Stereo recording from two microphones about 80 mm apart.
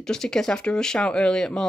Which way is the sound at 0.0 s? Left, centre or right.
Centre.